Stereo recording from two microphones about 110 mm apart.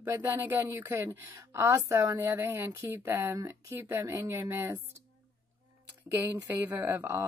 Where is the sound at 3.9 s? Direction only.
20° right (ahead or behind).